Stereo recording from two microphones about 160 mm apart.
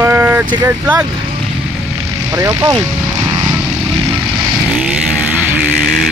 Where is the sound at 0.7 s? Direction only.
10° right (ahead or behind).